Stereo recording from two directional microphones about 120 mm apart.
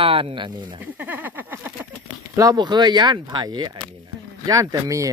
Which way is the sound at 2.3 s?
30° right (ahead or behind).